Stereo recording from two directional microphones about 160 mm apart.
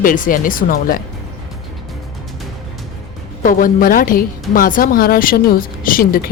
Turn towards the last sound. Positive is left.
turn(degrees=65)  # may be behind; listen again after turning